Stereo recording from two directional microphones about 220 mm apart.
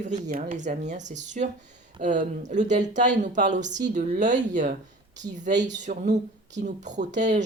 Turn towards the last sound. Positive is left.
turn(degrees=-35)  # may be behind; listen again after turning